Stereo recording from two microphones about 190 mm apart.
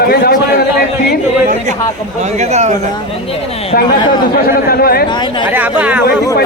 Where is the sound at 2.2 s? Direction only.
35° right (ahead or behind).